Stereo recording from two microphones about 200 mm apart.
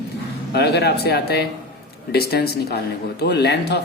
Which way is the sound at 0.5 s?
55° left (ahead or behind).